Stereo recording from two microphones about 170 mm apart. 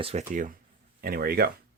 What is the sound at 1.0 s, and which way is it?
Speech, 60° right (ahead or behind).